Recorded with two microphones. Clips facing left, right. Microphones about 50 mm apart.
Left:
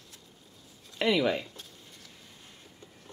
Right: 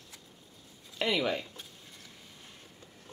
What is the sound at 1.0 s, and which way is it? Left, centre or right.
Speech, centre.